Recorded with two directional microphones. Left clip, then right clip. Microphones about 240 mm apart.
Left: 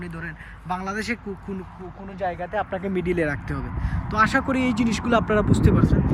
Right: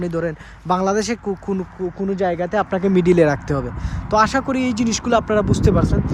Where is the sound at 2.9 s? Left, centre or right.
Centre.